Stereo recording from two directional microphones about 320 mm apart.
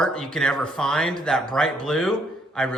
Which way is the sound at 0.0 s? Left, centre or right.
Centre.